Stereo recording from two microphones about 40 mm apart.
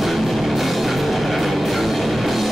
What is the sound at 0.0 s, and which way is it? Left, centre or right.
Music, centre.